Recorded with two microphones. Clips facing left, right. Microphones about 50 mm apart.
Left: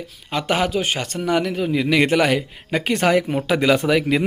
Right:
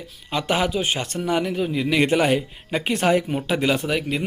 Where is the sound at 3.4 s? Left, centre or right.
Left.